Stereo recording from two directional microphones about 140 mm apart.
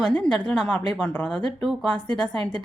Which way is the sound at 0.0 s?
5° left (ahead or behind).